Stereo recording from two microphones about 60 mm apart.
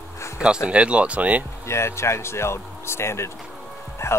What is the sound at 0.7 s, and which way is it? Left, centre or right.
Speech, centre.